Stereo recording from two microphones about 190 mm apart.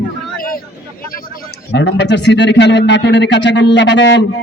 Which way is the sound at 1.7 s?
65° left (ahead or behind).